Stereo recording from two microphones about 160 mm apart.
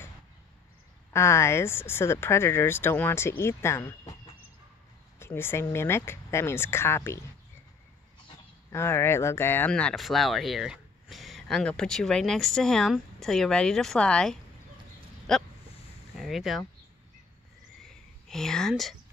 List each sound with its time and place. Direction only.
1.1 s speech: 15° left (ahead or behind)
5.2 s speech: 15° left (ahead or behind)
8.7 s speech: 15° left (ahead or behind); by 16.6 s centre (ahead or behind)
18.3 s speech: 5° left (ahead or behind)